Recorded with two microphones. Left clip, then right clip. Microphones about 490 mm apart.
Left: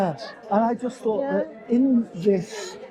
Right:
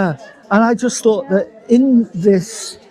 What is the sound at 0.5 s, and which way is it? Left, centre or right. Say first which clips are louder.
Speech: right 8 dB; right.